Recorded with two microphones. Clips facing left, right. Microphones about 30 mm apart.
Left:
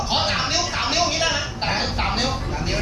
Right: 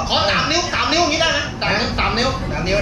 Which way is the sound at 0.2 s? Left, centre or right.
Right.